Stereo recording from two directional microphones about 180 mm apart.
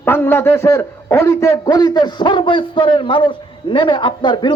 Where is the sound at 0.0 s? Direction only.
10° left (ahead or behind).